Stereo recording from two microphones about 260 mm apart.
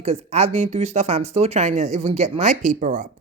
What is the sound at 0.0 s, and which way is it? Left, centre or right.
Speech, right.